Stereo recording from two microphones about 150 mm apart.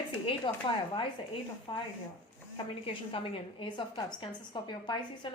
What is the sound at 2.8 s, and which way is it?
A woman's voice, 35° left (ahead or behind).